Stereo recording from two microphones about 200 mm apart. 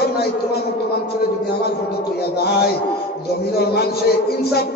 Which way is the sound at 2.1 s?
50° left (ahead or behind).